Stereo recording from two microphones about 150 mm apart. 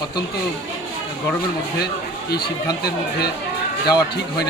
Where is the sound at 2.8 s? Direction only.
90° left.